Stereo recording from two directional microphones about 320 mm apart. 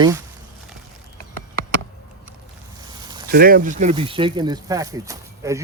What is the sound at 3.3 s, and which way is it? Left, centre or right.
Speech, right.